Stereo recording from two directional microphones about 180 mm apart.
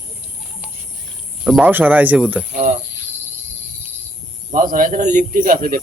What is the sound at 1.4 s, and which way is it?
Speech, centre (ahead or behind).